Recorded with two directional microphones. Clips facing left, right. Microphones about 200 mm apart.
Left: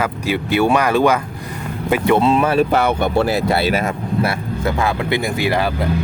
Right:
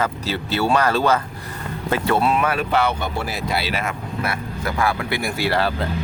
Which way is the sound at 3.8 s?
30° left (ahead or behind).